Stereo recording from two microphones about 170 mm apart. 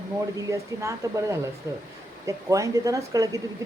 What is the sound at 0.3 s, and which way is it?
A woman's voice, 20° right (ahead or behind).